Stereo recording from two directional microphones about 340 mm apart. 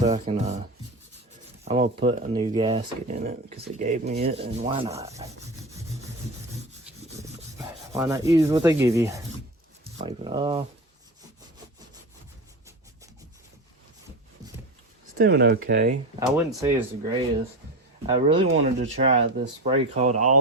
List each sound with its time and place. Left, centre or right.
0.0 s speech: centre
1.6 s speech: centre
7.2 s rub: centre
10.0 s speech: centre
15.2 s speech: right
16.5 s speech: centre